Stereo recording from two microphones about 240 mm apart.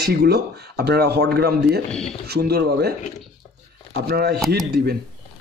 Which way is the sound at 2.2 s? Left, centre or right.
Right.